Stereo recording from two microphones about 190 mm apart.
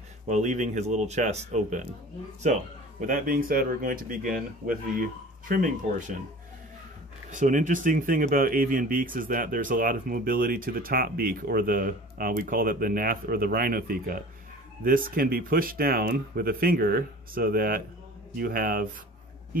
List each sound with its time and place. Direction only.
0.3 s speech: 40° right (ahead or behind)
7.2 s speech: 40° right (ahead or behind)